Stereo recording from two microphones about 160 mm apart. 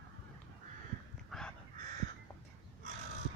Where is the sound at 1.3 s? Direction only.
5° left (ahead or behind).